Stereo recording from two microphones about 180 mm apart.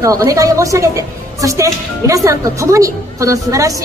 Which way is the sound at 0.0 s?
20° right (ahead or behind).